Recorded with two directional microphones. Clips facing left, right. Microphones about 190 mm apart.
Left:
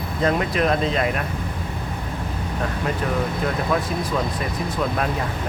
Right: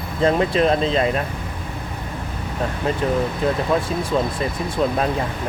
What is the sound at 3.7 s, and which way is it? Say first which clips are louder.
Speech: right 3 dB; 25° right (ahead or behind).